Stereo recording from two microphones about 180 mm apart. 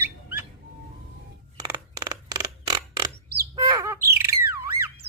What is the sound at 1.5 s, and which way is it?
Creak, 20° right (ahead or behind).